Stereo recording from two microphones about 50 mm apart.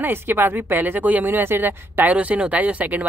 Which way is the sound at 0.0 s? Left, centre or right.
Right.